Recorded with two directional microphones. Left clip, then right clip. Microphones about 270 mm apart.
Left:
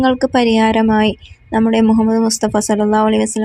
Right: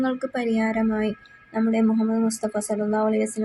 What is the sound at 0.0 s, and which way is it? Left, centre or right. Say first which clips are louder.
A woman's voice: left 12 dB; left.